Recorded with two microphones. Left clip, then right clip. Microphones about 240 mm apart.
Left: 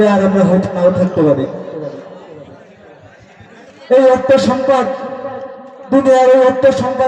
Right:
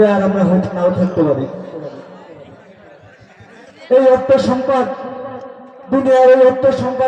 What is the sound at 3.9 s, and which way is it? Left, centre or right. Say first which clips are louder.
Speech: left 1 dB; left.